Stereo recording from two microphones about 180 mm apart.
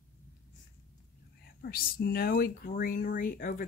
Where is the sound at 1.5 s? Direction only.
55° left (ahead or behind).